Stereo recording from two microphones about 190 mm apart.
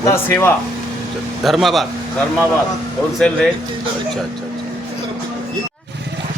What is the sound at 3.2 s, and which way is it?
Speech, centre (ahead or behind).